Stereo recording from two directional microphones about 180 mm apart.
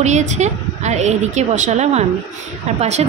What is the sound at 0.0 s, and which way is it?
A woman's voice, 40° right (ahead or behind).